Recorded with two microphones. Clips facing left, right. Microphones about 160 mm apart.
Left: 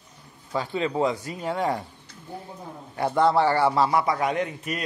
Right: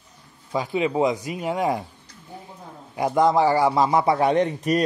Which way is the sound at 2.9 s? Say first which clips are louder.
Right 2 dB; 15° right (ahead or behind).